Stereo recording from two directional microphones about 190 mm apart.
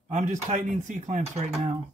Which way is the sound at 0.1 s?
40° right (ahead or behind).